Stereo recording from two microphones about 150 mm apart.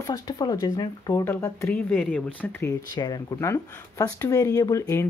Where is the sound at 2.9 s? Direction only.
25° left (ahead or behind).